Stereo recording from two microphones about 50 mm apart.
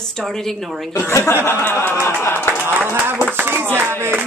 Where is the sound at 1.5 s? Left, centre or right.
Left.